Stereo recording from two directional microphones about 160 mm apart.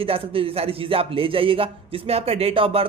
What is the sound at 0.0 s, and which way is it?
A man's voice, 35° right (ahead or behind).